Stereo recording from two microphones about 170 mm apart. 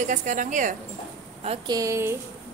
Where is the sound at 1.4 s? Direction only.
35° right (ahead or behind).